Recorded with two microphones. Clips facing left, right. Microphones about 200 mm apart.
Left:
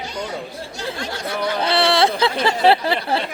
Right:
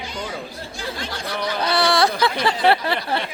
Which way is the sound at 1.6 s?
25° left (ahead or behind).